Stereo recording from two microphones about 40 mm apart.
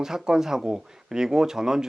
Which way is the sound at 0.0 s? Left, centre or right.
Centre.